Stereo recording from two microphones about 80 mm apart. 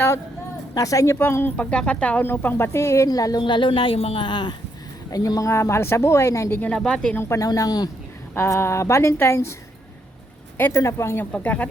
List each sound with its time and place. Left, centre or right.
0.7 s speech: left
1.1 s speech: left
1.5 s speech: centre
2.2 s speech: left
3.1 s a woman's voice: left
3.4 s speech: left
5.1 s speech: left
6.7 s speech: centre
7.3 s a woman's voice: left
8.4 s speech: left
10.7 s speech: left
11.3 s speech: centre